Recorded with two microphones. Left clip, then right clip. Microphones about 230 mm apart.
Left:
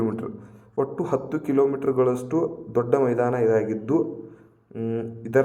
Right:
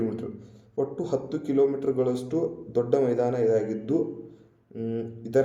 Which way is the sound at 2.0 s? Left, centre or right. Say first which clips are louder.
Left 7 dB; left.